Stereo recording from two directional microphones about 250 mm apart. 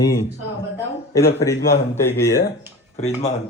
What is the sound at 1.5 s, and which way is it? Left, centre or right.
Speech, left.